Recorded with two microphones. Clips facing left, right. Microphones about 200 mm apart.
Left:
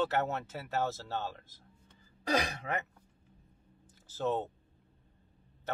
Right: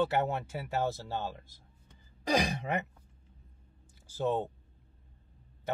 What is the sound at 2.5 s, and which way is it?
Speech, 20° right (ahead or behind).